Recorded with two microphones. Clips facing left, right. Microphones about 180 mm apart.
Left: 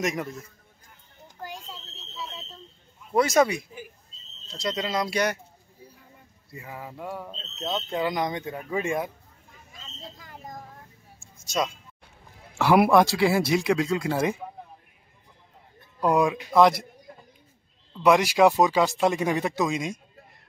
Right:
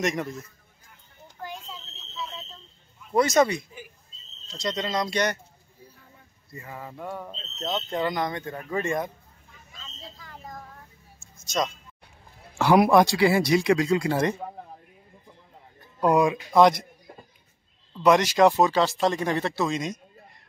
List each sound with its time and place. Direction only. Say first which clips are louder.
0.0 s speech: right 1 dB; 5° left (ahead or behind)
3.1 s speech: even; 5° left (ahead or behind)
6.5 s speech: even; 10° left (ahead or behind)
11.4 s speech: even; 10° left (ahead or behind)
16.0 s speech: right 1 dB; centre (ahead or behind)
18.0 s speech: even; 10° left (ahead or behind)